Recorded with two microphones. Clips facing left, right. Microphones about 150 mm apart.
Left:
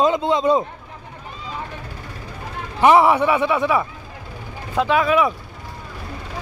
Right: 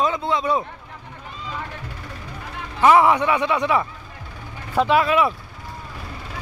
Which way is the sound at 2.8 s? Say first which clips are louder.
Left 1 dB; 15° left (ahead or behind).